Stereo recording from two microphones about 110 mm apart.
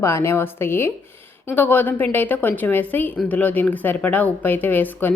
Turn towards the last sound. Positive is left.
turn(degrees=15)  # may be behind; listen again after turning